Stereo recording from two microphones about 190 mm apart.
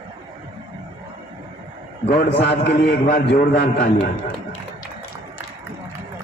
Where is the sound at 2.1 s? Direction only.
55° left (ahead or behind).